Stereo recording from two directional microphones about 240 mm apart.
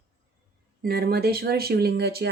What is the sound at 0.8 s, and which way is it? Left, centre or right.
Speech, right.